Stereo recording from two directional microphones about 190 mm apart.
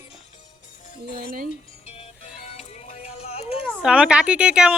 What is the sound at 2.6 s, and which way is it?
Music, 35° left (ahead or behind).